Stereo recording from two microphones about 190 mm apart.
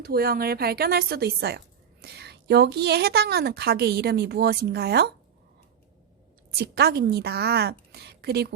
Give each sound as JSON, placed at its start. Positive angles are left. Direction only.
{"t": 0.0, "sound": "a woman's voice", "side_deg": -50}
{"t": 6.5, "sound": "a woman's voice", "side_deg": -55}